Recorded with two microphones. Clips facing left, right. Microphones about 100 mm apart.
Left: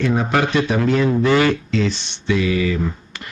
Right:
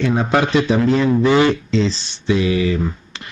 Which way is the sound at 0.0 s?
25° right (ahead or behind).